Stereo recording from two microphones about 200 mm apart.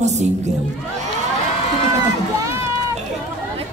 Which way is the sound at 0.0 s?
35° right (ahead or behind).